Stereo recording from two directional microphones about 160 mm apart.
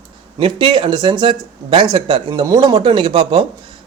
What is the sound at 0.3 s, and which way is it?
A man's voice, 30° right (ahead or behind).